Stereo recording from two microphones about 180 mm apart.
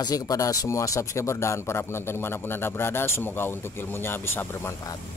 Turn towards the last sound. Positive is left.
turn(degrees=15)  # may be behind; listen again after turning